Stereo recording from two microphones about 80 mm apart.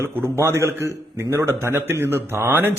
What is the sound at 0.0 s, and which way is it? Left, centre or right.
A man's voice, right.